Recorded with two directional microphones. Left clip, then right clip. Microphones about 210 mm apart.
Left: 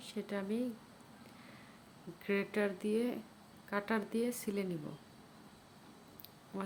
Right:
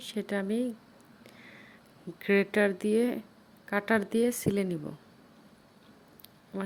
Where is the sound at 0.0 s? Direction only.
30° right (ahead or behind).